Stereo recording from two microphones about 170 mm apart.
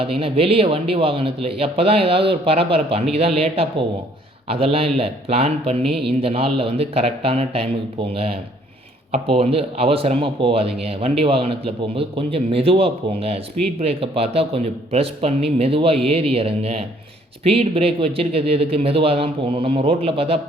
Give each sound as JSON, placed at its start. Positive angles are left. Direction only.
{"t": 0.0, "sound": "a man's voice", "side_deg": -35}